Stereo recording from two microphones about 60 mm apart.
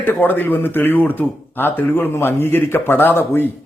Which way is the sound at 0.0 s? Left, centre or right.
Left.